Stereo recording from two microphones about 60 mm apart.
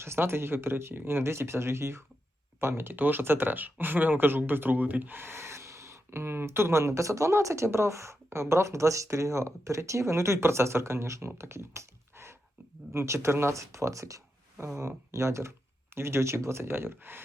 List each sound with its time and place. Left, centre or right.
0.0 s speech: right
11.3 s a sound: right
12.9 s speech: right